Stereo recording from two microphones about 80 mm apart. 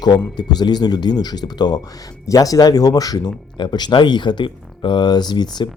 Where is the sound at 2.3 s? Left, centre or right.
Left.